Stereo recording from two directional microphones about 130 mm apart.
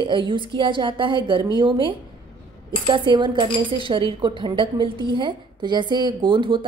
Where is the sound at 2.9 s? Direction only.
40° right (ahead or behind).